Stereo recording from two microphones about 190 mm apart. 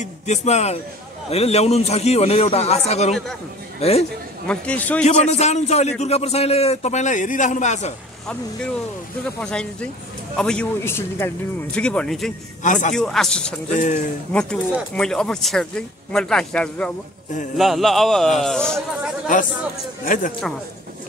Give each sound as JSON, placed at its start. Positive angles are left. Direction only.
{"t": 0.0, "sound": "a man's voice", "side_deg": 35}
{"t": 4.5, "sound": "a man's voice", "side_deg": 5}
{"t": 5.0, "sound": "a man's voice", "side_deg": 35}
{"t": 9.4, "sound": "speech", "side_deg": 5}
{"t": 13.7, "sound": "a man's voice", "side_deg": 40}
{"t": 14.3, "sound": "speech", "side_deg": 5}
{"t": 20.1, "sound": "speech", "side_deg": 45}